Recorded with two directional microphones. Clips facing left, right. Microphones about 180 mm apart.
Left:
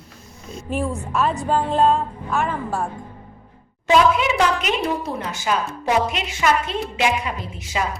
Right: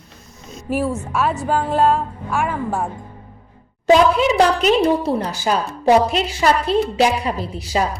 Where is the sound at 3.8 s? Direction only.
35° right (ahead or behind).